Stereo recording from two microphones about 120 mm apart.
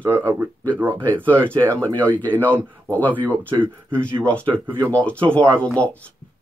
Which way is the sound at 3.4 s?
15° right (ahead or behind).